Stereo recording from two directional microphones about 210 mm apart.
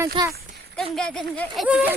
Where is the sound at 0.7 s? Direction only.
5° left (ahead or behind).